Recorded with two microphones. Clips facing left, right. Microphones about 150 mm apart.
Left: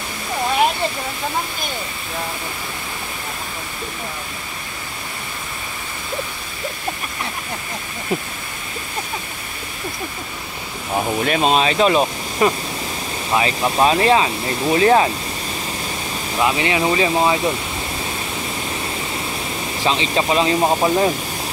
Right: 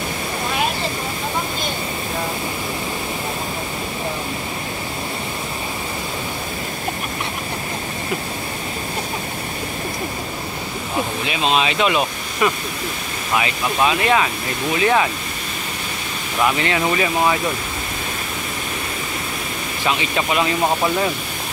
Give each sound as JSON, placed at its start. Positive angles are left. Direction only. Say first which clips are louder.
{"t": 11.2, "sound": "speech", "louder": "left 3 dB", "side_deg": 45}
{"t": 16.3, "sound": "speech", "louder": "left 1 dB", "side_deg": 20}
{"t": 19.8, "sound": "speech", "louder": "left 2 dB", "side_deg": 30}